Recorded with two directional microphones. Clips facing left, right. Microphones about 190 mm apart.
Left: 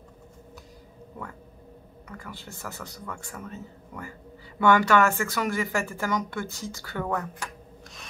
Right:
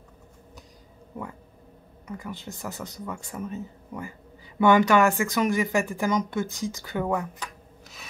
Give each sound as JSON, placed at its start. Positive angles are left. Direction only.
{"t": 2.0, "sound": "speech", "side_deg": -20}